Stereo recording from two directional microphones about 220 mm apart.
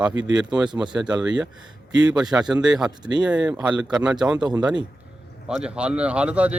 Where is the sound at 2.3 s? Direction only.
5° right (ahead or behind).